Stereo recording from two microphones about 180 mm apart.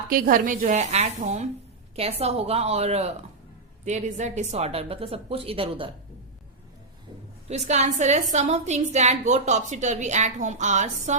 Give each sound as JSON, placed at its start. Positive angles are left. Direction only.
{"t": 0.1, "sound": "a woman's voice", "side_deg": -50}
{"t": 7.4, "sound": "a woman's voice", "side_deg": -40}